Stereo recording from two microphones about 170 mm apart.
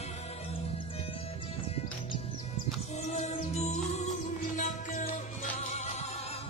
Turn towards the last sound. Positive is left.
turn(degrees=40)  # may be behind; listen again after turning